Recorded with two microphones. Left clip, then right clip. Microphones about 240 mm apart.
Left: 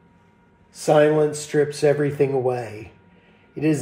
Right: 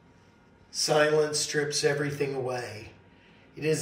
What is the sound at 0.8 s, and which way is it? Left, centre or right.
Speech, left.